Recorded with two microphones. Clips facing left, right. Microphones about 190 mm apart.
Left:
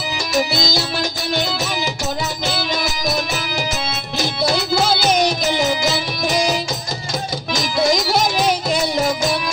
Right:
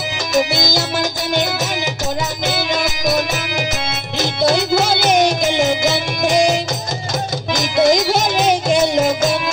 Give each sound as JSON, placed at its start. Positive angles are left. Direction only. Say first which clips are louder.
{"t": 0.3, "sound": "music", "louder": "right 3 dB", "side_deg": -20}
{"t": 2.4, "sound": "music", "louder": "right 4 dB", "side_deg": -20}
{"t": 4.2, "sound": "music", "louder": "right 4 dB", "side_deg": -20}